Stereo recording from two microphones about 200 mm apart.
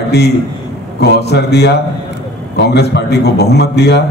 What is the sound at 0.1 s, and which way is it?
A man's voice, 55° left (ahead or behind).